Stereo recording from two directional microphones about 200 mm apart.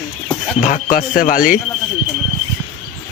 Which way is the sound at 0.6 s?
40° left (ahead or behind).